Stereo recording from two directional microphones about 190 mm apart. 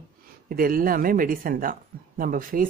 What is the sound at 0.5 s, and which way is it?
Speech, 50° right (ahead or behind).